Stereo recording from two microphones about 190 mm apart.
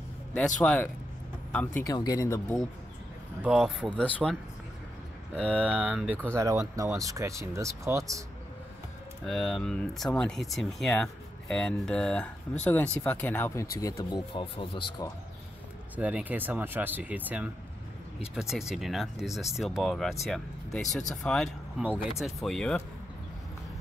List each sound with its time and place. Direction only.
1.5 s speech: 5° left (ahead or behind)
1.9 s speech: 20° left (ahead or behind)
3.4 s speech: 5° right (ahead or behind)
3.9 s speech: 5° left (ahead or behind)
5.4 s speech: 5° left (ahead or behind)
5.8 s speech: 10° right (ahead or behind)
9.2 s speech: 5° left (ahead or behind); by 15.0 s 25° left (ahead or behind)
16.0 s speech: 5° right (ahead or behind)